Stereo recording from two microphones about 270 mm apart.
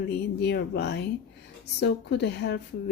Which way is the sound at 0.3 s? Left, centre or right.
Left.